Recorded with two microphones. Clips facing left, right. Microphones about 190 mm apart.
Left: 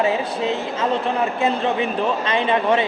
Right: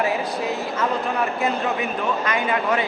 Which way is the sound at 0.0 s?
25° left (ahead or behind).